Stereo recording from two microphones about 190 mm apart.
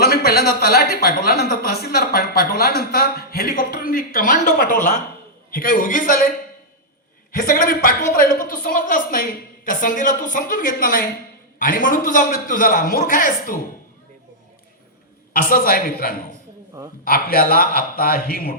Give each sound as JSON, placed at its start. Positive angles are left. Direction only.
{"t": 0.0, "sound": "speech", "side_deg": 55}
{"t": 7.3, "sound": "speech", "side_deg": 50}
{"t": 15.4, "sound": "speech", "side_deg": 50}